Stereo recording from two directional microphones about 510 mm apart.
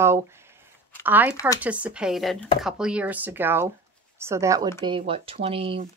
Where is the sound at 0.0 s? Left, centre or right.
Centre.